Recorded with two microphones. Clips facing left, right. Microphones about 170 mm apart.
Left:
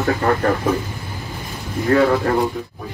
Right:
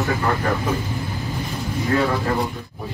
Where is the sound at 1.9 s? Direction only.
55° left (ahead or behind).